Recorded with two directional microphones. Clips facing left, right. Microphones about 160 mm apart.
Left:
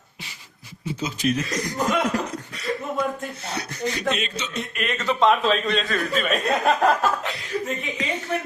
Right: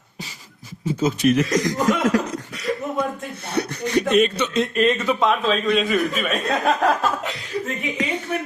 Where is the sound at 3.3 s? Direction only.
60° right (ahead or behind); by 4.7 s 75° right (ahead or behind).